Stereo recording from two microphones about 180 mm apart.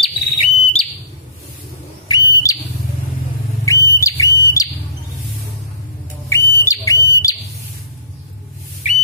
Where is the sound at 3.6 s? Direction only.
15° left (ahead or behind).